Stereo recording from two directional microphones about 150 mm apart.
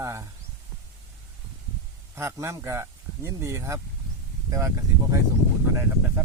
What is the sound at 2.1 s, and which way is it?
Speech, 20° right (ahead or behind).